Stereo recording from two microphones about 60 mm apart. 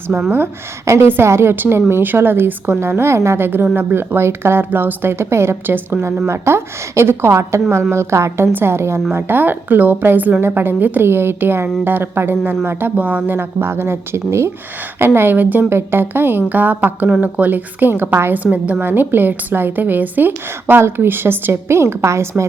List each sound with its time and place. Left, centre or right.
0.3 s a woman's voice: right
9.1 s a woman's voice: right
13.0 s speech: right
13.3 s a woman's voice: right
18.5 s a woman's voice: right